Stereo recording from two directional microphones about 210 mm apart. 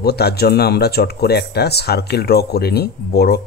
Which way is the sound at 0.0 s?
50° left (ahead or behind).